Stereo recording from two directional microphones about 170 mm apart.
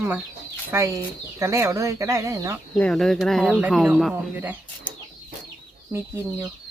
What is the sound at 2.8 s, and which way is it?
Speech, 5° left (ahead or behind).